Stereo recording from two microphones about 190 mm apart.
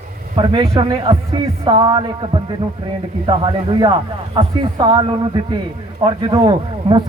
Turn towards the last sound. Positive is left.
turn(degrees=-25)  # may be behind; listen again after turning